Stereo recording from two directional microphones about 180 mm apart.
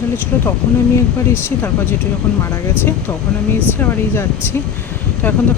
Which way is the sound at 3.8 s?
15° left (ahead or behind).